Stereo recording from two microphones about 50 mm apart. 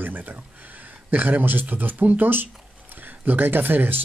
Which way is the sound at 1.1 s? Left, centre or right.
Right.